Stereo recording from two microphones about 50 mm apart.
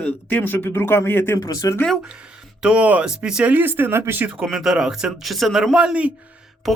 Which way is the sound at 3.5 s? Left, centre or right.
Right.